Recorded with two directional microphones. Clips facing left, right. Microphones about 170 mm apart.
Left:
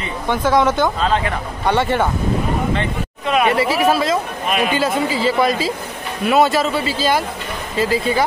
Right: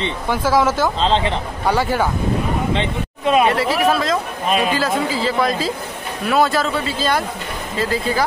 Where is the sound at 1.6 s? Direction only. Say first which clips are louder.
Left 1 dB; centre (ahead or behind).